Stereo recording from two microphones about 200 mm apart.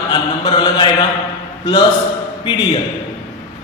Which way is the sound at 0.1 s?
25° left (ahead or behind).